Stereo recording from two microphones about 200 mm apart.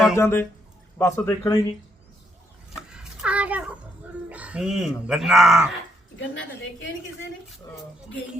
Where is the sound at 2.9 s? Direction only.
5° right (ahead or behind).